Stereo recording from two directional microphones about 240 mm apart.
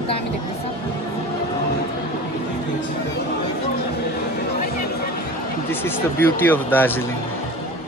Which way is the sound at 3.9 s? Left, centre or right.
Left.